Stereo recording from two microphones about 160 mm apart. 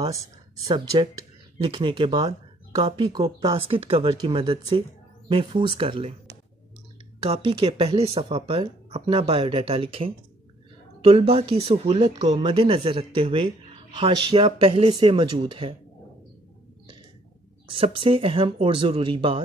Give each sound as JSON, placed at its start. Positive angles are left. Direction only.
{"t": 0.7, "sound": "speech", "side_deg": -30}
{"t": 3.5, "sound": "speech", "side_deg": -35}
{"t": 7.2, "sound": "speech", "side_deg": -35}
{"t": 17.6, "sound": "speech", "side_deg": -35}